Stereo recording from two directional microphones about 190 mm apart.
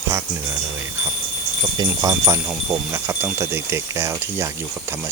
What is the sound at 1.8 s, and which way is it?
Speech, 20° right (ahead or behind).